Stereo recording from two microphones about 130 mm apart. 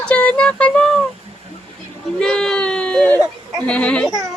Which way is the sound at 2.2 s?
5° left (ahead or behind).